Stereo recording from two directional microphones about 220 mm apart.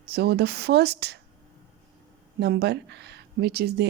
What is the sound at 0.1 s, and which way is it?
Speech, 45° right (ahead or behind).